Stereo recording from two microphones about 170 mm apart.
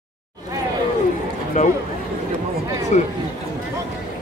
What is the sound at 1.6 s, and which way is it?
Speech, 45° left (ahead or behind).